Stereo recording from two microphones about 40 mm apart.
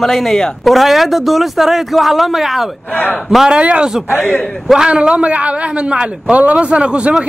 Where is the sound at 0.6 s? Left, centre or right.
Centre.